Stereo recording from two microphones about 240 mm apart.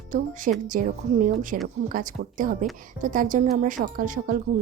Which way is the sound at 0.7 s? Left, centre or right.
Right.